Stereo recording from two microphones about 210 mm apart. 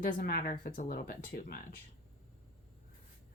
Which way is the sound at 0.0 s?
40° left (ahead or behind).